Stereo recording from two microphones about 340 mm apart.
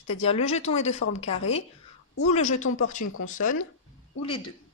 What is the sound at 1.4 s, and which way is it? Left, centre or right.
Speech, left.